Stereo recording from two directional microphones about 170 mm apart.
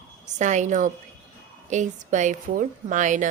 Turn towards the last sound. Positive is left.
turn(degrees=-45)  # may be behind; listen again after turning